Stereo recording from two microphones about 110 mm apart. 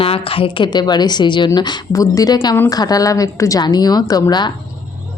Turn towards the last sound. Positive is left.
turn(degrees=35)  # may be behind; listen again after turning